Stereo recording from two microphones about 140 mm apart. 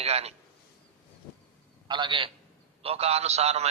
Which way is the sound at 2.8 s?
45° right (ahead or behind).